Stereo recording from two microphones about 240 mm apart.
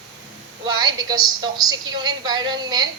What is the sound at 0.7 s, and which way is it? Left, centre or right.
A man's voice, centre.